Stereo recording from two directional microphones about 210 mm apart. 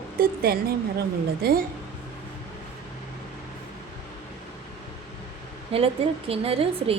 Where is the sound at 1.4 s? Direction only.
50° right (ahead or behind).